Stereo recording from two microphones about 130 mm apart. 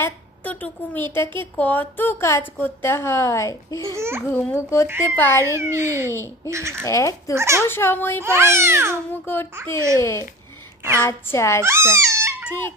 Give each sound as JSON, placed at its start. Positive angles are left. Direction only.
{"t": 0.0, "sound": "a woman's voice", "side_deg": 15}
{"t": 3.9, "sound": "a child's voice", "side_deg": -20}
{"t": 4.3, "sound": "a woman's voice", "side_deg": 20}
{"t": 5.4, "sound": "a child's voice", "side_deg": -20}
{"t": 6.8, "sound": "a woman's voice", "side_deg": 25}
{"t": 7.3, "sound": "a child's voice", "side_deg": -20}
{"t": 7.6, "sound": "a child's voice", "side_deg": 20}
{"t": 8.2, "sound": "a child's voice", "side_deg": -20}
{"t": 9.2, "sound": "a child's voice", "side_deg": 15}
{"t": 11.6, "sound": "speech", "side_deg": -20}
{"t": 12.5, "sound": "a child's voice", "side_deg": 15}